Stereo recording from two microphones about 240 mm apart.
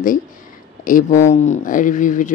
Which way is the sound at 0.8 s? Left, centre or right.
Left.